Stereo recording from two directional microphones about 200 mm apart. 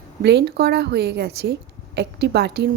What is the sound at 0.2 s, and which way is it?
A woman's voice, 55° right (ahead or behind).